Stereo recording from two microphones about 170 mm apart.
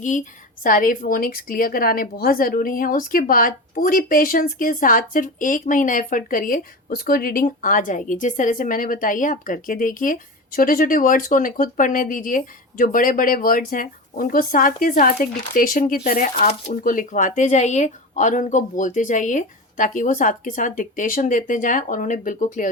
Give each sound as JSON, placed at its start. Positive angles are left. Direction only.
{"t": 0.6, "sound": "a woman's voice", "side_deg": 55}